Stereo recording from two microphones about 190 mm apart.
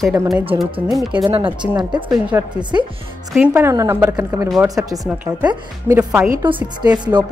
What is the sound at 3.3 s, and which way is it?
A woman's voice, 5° right (ahead or behind).